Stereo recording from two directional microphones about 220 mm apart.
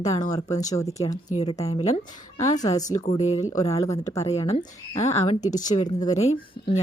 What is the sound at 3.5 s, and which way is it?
Speech, 15° left (ahead or behind).